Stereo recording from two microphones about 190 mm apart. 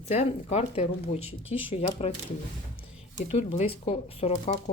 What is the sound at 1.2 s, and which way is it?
Speech, 10° right (ahead or behind).